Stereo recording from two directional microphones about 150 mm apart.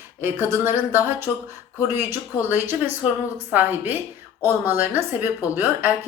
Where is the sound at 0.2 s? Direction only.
15° right (ahead or behind).